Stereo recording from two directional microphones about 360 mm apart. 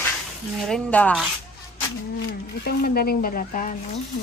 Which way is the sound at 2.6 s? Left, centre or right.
Left.